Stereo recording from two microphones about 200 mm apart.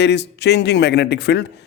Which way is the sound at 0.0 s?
60° left (ahead or behind).